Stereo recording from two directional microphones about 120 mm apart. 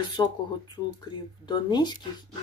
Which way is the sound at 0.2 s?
30° left (ahead or behind).